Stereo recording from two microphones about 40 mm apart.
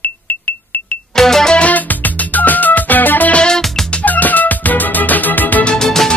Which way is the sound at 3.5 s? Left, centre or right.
Centre.